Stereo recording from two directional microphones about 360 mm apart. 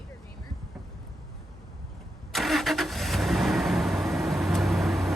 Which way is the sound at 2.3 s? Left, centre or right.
Centre.